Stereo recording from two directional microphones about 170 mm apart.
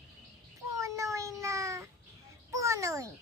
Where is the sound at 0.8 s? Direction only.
15° right (ahead or behind).